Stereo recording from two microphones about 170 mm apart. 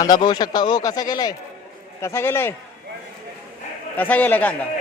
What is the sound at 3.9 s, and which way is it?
Speech, 10° left (ahead or behind).